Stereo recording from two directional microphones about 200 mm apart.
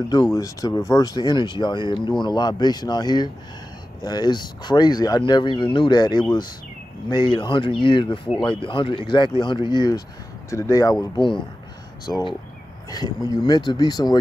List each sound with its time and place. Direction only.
0.1 s speech: 15° left (ahead or behind)